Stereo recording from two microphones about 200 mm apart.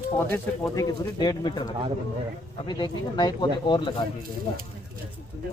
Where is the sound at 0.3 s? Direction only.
20° left (ahead or behind).